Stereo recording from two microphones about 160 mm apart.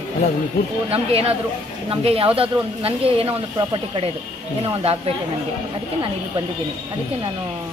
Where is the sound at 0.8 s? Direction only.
40° right (ahead or behind).